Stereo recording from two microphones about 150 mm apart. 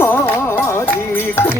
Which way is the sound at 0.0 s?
15° left (ahead or behind).